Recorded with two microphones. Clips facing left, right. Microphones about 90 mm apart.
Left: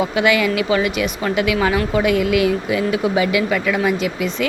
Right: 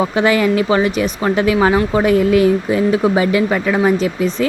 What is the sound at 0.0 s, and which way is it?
Speech, 35° right (ahead or behind).